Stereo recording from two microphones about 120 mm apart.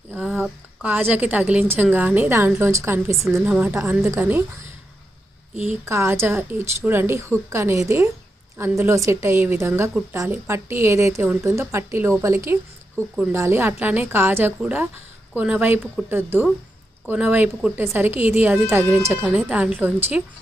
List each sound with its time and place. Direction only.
0.1 s a woman's voice: 15° right (ahead or behind)
5.8 s a woman's voice: 25° right (ahead or behind)